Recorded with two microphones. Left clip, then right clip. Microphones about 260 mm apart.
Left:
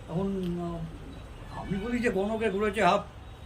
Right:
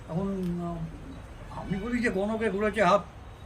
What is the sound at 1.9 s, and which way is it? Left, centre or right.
A man's voice, centre.